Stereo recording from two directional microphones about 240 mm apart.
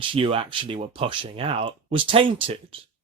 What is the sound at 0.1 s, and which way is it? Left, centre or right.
Speech, right.